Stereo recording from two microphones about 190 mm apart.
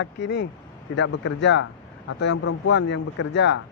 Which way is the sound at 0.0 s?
65° left (ahead or behind).